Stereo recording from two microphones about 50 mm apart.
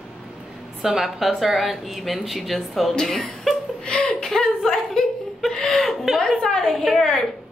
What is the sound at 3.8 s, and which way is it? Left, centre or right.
Laughter, centre.